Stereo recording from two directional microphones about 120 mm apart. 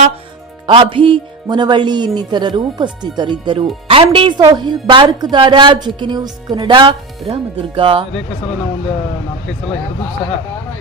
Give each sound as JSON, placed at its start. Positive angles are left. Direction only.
{"t": 0.7, "sound": "speech", "side_deg": -45}